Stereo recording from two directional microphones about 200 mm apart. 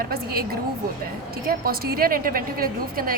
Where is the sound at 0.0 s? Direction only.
50° right (ahead or behind).